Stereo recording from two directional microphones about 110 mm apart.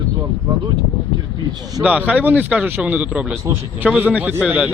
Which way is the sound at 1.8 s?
10° right (ahead or behind).